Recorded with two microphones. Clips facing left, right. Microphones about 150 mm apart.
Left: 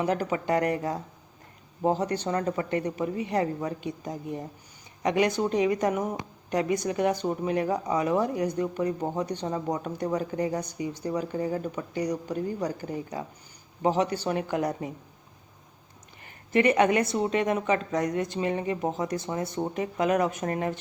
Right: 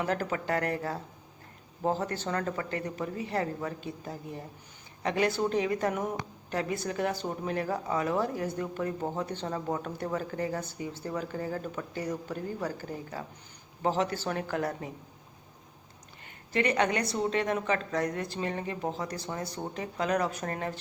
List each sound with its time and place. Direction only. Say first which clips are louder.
0.3 s speech: left 5 dB; 15° left (ahead or behind)
16.5 s speech: left 6 dB; 25° left (ahead or behind)